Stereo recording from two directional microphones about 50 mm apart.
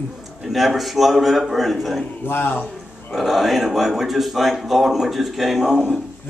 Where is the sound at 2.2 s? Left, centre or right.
Left.